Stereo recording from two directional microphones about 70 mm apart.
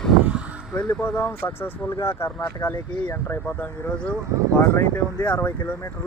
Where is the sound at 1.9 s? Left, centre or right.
Left.